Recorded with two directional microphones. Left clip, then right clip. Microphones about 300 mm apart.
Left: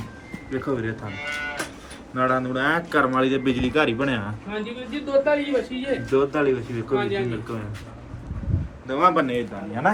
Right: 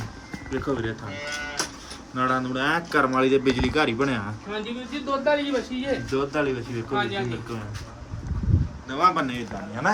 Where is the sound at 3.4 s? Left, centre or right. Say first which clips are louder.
Right 1 dB; right.